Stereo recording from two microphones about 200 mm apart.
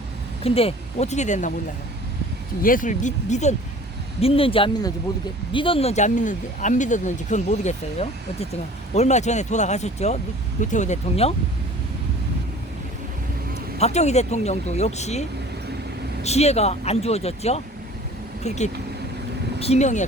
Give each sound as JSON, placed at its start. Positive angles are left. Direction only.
{"t": 0.4, "sound": "speech", "side_deg": 30}
{"t": 2.6, "sound": "speech", "side_deg": 45}
{"t": 13.5, "sound": "speech", "side_deg": 30}
{"t": 16.2, "sound": "speech", "side_deg": 30}